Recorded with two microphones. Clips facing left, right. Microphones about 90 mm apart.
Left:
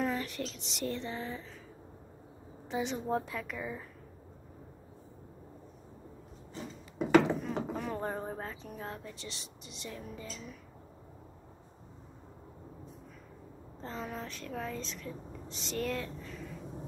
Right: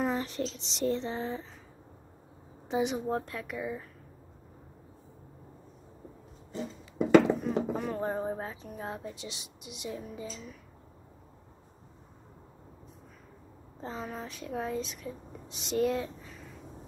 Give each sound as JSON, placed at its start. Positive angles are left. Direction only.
{"t": 0.0, "sound": "speech", "side_deg": -25}
{"t": 2.7, "sound": "speech", "side_deg": -15}
{"t": 3.1, "sound": "a woman's voice", "side_deg": 0}
{"t": 7.4, "sound": "speech", "side_deg": -10}
{"t": 13.7, "sound": "speech", "side_deg": -15}